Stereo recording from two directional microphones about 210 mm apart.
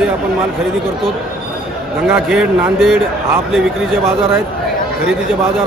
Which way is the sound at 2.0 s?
Centre (ahead or behind).